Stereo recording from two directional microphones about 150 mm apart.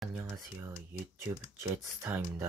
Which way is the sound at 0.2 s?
15° right (ahead or behind).